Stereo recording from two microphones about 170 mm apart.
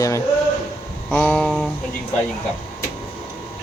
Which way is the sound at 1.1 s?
5° left (ahead or behind).